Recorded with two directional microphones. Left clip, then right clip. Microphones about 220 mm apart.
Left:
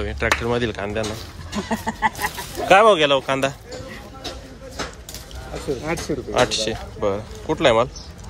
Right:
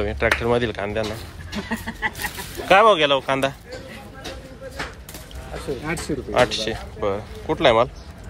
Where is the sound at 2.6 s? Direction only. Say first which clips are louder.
Left 1 dB; 15° left (ahead or behind).